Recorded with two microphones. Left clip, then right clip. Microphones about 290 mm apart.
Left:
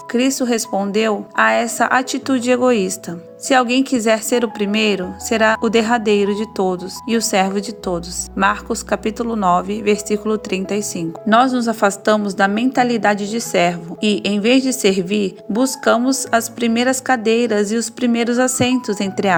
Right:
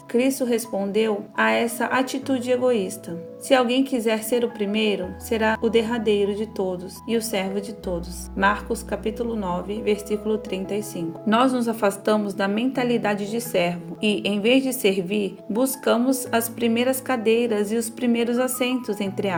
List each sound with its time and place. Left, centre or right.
0.1 s speech: left